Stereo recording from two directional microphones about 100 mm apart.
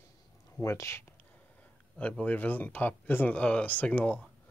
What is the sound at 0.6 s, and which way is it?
Speech, 30° left (ahead or behind).